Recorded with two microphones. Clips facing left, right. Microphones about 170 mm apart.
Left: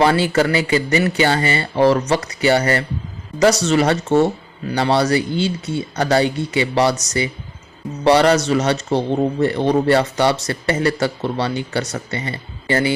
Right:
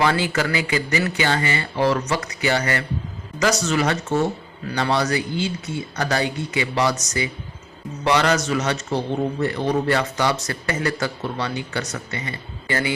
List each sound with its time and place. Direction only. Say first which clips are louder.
0.0 s speech: left 5 dB; 35° left (ahead or behind)